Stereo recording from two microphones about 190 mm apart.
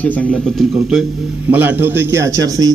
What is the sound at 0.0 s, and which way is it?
A man's voice, 5° left (ahead or behind).